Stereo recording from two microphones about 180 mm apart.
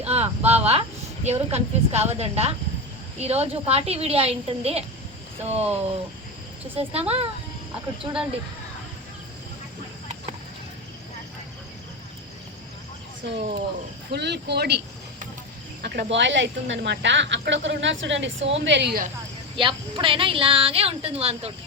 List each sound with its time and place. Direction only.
0.0 s speech: 35° right (ahead or behind)
13.2 s speech: 70° right (ahead or behind)
15.8 s speech: 75° right (ahead or behind)
19.5 s a woman's voice: 25° right (ahead or behind)